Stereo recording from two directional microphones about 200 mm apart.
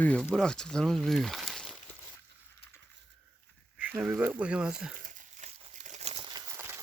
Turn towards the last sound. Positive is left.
turn(degrees=-10)  # may be behind; listen again after turning